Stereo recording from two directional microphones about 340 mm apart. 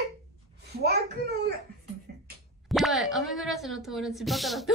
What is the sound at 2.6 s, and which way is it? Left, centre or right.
Speech, centre.